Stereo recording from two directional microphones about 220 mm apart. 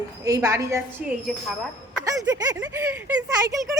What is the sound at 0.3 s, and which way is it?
Speech, 15° right (ahead or behind).